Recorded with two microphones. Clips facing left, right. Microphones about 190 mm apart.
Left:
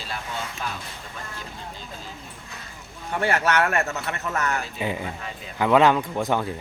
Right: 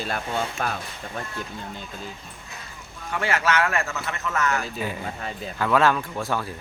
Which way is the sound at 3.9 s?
35° left (ahead or behind).